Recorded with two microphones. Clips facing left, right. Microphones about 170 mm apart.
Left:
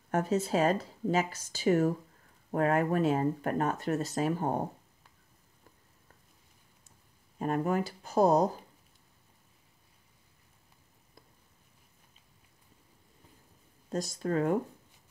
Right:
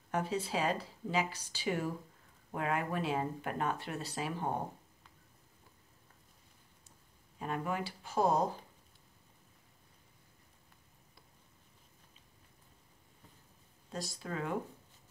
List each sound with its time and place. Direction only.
0.1 s speech: 45° left (ahead or behind)
7.3 s speech: 45° left (ahead or behind)
13.8 s speech: 45° left (ahead or behind)